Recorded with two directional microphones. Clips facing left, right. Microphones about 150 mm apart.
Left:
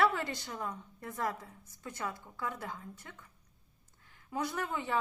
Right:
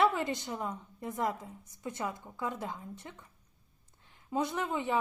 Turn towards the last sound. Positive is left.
turn(degrees=-20)  # may be behind; listen again after turning